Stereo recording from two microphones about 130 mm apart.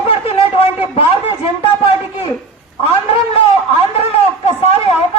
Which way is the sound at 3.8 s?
50° left (ahead or behind).